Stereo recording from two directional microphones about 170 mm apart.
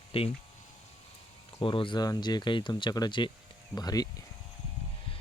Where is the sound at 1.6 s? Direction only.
30° left (ahead or behind).